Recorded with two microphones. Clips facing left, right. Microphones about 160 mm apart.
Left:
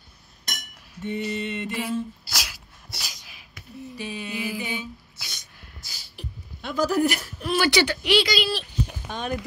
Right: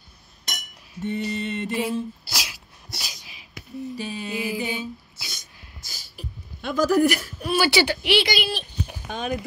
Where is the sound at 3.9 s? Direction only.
35° right (ahead or behind).